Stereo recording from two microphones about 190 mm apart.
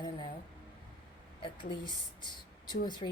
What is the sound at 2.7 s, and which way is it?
Speech, 25° left (ahead or behind).